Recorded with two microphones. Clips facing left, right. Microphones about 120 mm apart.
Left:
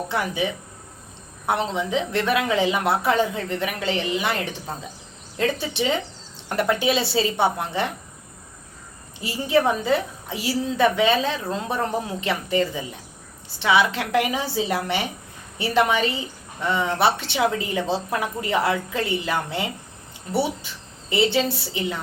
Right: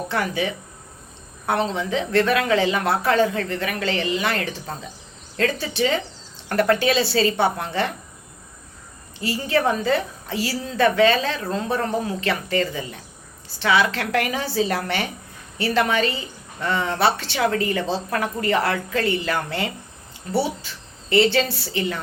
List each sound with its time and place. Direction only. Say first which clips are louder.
0.1 s a woman's voice: right 2 dB; 15° left (ahead or behind)
9.2 s a woman's voice: left 1 dB; 15° left (ahead or behind)